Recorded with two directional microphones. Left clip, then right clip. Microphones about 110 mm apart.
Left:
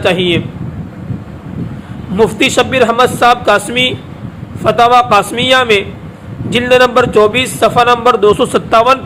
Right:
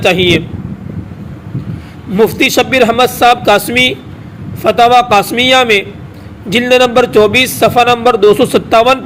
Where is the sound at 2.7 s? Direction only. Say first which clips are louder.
Right 1 dB; 55° right (ahead or behind).